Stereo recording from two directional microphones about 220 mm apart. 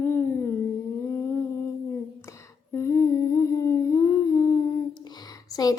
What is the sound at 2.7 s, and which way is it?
Humming, 10° left (ahead or behind).